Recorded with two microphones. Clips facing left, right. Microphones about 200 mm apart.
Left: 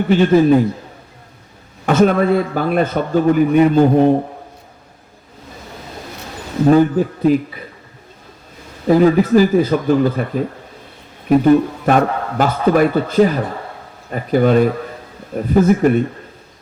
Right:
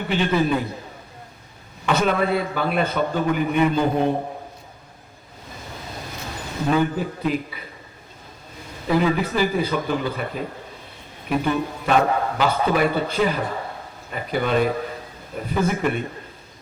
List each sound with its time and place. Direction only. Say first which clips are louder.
0.1 s speech: left 9 dB; 45° left (ahead or behind)
1.9 s speech: left 7 dB; 45° left (ahead or behind)
6.7 s speech: left 9 dB; 40° left (ahead or behind)
8.9 s speech: left 9 dB; 40° left (ahead or behind)